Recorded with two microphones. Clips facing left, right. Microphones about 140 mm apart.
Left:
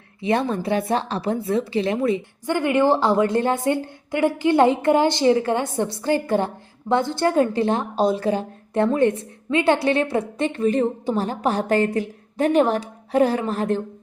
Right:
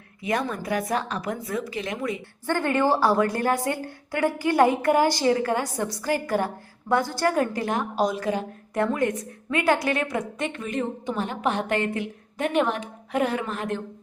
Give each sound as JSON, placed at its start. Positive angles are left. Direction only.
{"t": 0.2, "sound": "a woman's voice", "side_deg": 30}
{"t": 2.5, "sound": "a woman's voice", "side_deg": 15}